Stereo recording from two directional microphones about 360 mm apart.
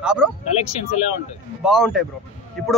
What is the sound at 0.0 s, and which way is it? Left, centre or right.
Speech, centre.